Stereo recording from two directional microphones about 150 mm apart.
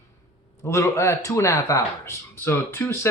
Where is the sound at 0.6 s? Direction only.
20° left (ahead or behind).